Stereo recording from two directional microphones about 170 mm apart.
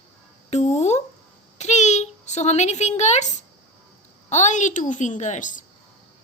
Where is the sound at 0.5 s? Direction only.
45° left (ahead or behind).